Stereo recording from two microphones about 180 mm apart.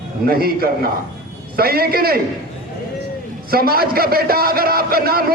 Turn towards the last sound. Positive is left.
turn(degrees=-60)  # may be behind; listen again after turning